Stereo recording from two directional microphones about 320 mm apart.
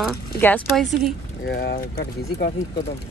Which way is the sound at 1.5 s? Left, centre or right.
Left.